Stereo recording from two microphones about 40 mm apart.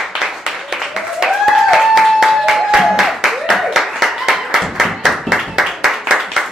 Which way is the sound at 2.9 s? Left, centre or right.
Centre.